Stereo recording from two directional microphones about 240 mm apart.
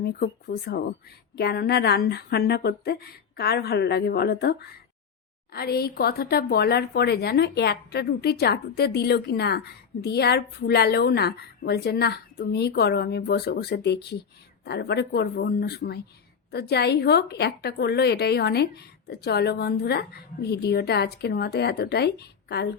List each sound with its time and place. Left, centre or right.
0.0 s speech: left